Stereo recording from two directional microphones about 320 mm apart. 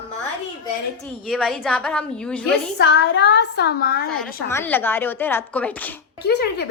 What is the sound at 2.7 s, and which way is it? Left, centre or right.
A woman's voice, left.